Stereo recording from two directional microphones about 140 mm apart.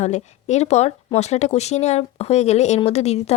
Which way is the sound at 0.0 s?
55° left (ahead or behind).